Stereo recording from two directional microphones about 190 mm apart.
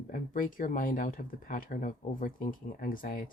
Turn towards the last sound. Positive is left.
turn(degrees=45)  # may be behind; listen again after turning